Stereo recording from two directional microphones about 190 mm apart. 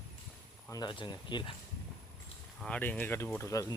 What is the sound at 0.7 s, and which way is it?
Speech, 25° left (ahead or behind).